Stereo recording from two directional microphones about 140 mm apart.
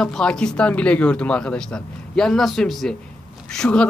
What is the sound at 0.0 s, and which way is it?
A woman's voice, 5° left (ahead or behind).